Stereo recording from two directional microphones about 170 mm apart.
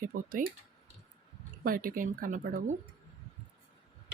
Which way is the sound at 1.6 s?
55° right (ahead or behind).